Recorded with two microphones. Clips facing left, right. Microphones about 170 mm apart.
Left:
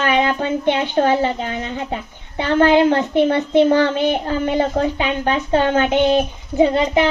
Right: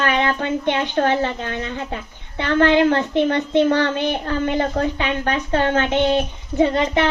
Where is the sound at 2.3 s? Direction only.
15° left (ahead or behind).